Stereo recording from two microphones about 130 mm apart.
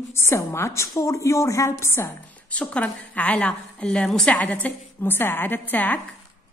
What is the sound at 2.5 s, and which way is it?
A woman's voice, 10° left (ahead or behind).